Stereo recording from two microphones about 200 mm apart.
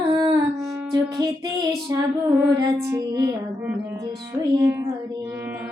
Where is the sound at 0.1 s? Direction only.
20° right (ahead or behind).